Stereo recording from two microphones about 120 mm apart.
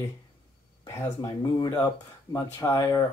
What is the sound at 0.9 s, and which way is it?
Speech, 25° left (ahead or behind).